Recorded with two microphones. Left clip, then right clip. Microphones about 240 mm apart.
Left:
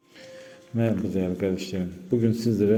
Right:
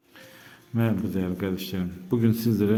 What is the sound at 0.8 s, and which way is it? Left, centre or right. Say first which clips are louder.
Speech: left 2 dB; centre.